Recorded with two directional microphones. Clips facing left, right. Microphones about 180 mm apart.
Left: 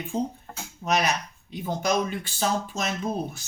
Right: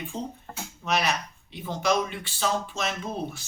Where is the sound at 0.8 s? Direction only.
40° left (ahead or behind).